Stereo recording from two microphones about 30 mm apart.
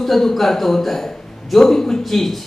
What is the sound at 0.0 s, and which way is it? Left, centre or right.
A man's voice, centre.